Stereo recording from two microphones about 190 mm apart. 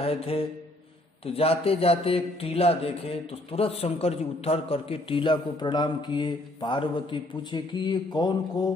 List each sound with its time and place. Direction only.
0.0 s mantra: 30° left (ahead or behind)
1.2 s speech: 30° left (ahead or behind)